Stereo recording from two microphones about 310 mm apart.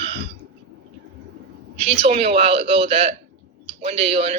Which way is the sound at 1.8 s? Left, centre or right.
Centre.